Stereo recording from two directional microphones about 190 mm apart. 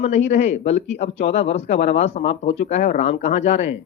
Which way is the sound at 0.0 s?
35° left (ahead or behind).